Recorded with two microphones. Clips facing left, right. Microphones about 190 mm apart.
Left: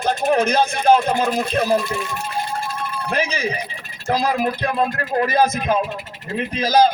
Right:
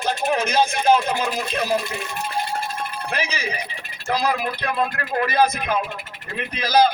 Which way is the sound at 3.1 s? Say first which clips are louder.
Left 6 dB; 50° left (ahead or behind).